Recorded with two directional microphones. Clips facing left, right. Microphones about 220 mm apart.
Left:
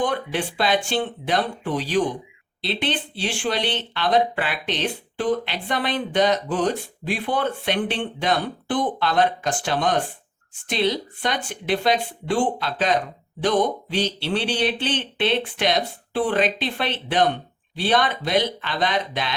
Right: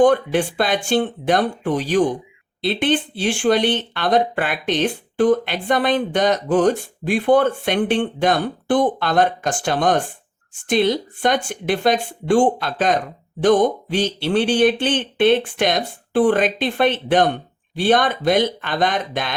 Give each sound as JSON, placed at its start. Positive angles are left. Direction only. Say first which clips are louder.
{"t": 0.0, "sound": "speech", "louder": "right 9 dB", "side_deg": -45}